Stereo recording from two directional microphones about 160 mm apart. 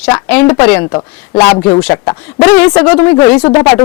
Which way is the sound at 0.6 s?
10° left (ahead or behind).